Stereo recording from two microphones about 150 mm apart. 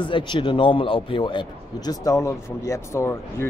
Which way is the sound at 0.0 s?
30° left (ahead or behind).